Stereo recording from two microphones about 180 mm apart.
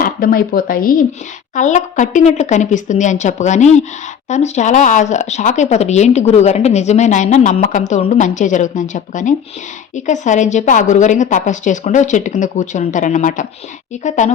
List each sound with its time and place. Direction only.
0.0 s a woman's voice: 55° left (ahead or behind)